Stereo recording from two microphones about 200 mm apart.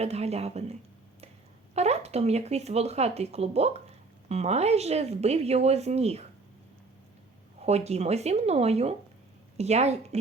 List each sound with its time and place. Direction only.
0.0 s speech: 30° right (ahead or behind)
7.6 s speech: 30° right (ahead or behind)